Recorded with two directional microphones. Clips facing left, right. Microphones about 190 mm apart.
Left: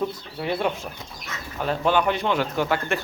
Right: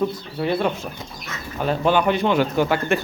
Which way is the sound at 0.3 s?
15° left (ahead or behind).